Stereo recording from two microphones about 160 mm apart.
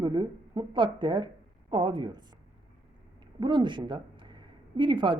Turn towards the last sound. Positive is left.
turn(degrees=-30)  # may be behind; listen again after turning